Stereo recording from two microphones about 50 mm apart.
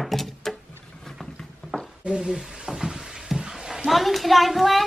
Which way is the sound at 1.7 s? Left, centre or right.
Centre.